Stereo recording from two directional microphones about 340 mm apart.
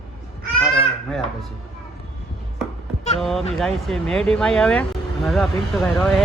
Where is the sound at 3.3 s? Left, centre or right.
Centre.